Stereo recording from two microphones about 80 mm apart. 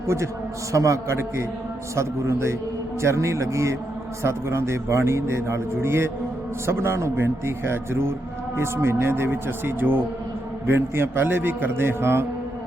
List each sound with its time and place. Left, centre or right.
0.7 s a man's voice: right